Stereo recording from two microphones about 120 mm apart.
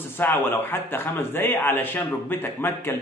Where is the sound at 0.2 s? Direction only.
20° left (ahead or behind).